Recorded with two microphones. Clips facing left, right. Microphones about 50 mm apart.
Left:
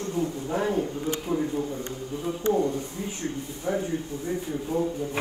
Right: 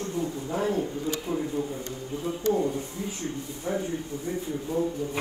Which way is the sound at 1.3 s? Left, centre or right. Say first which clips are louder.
Left 4 dB; left.